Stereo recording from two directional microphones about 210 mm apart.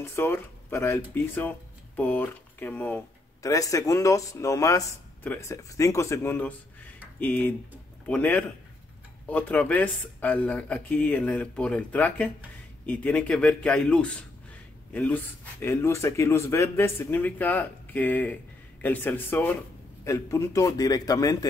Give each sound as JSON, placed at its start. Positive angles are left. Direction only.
{"t": 0.0, "sound": "a man's voice", "side_deg": 10}